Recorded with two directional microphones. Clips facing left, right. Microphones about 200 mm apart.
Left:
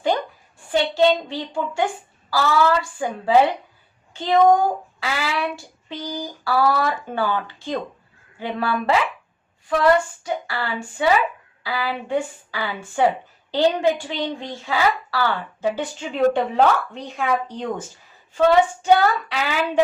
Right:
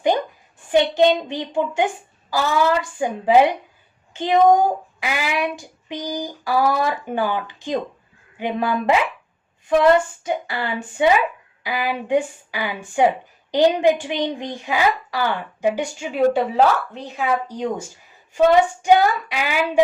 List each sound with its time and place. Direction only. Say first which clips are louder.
0.7 s a woman's voice: right 2 dB; 15° right (ahead or behind)
9.6 s a sound: right 3 dB; 20° right (ahead or behind)
11.6 s a woman's voice: right 2 dB; 15° right (ahead or behind)